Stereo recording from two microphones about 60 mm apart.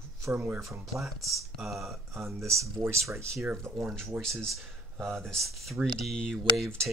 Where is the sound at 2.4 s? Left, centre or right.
Right.